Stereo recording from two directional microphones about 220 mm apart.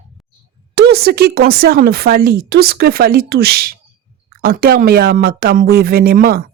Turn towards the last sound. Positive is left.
turn(degrees=-40)  # may be behind; listen again after turning